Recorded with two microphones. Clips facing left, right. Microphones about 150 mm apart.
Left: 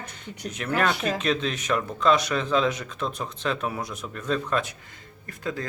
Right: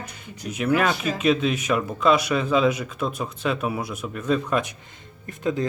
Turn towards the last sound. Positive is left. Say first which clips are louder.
# right 6 dB
turn(degrees=-20)  # may be behind; listen again after turning